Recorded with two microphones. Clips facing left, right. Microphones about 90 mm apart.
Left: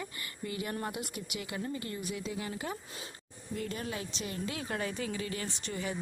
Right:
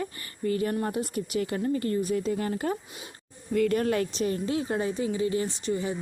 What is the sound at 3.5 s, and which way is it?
Speech, 65° right (ahead or behind).